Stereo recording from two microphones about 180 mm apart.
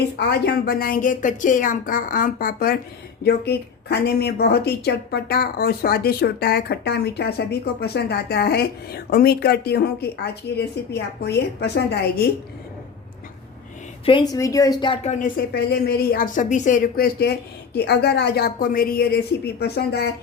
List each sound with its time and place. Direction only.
0.2 s a woman's voice: 60° left (ahead or behind)
14.0 s a woman's voice: 25° left (ahead or behind)
15.0 s a woman's voice: 50° left (ahead or behind)